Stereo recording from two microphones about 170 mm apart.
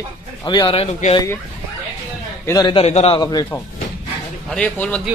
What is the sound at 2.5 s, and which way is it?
Speech, 25° left (ahead or behind).